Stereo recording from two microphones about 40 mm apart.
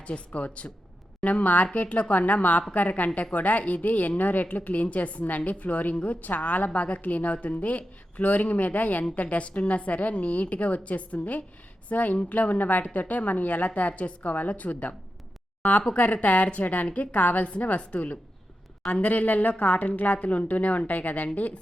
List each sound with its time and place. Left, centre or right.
0.0 s a woman's voice: left
6.7 s a woman's voice: left
16.1 s a woman's voice: left